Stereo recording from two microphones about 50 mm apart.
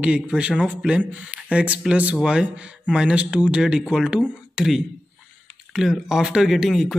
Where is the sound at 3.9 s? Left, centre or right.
Centre.